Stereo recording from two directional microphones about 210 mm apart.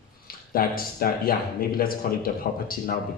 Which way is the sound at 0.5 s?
45° left (ahead or behind).